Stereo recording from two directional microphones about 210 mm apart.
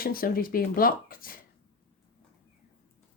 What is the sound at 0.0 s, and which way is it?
Speech, 45° left (ahead or behind).